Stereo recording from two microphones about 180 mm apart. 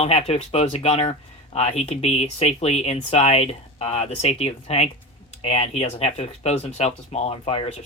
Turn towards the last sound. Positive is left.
turn(degrees=35)  # may be behind; listen again after turning